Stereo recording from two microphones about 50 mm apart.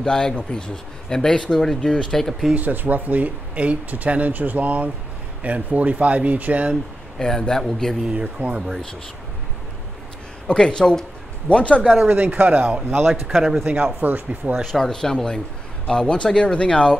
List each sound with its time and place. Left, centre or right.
0.0 s speech: centre
2.5 s speech: right
7.2 s speech: centre
8.1 s speech: right
10.4 s speech: centre
12.2 s speech: right
13.3 s speech: centre
13.7 s speech: right
14.0 s speech: right
14.6 s speech: centre